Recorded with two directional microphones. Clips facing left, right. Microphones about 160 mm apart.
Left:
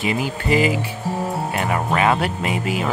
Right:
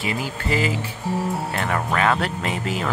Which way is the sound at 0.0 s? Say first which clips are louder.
Left 4 dB; 20° left (ahead or behind).